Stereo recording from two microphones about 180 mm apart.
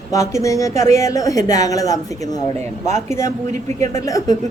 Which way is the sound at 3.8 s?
15° left (ahead or behind).